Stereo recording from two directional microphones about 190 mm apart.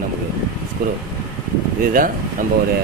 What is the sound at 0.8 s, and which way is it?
Speech, 50° right (ahead or behind).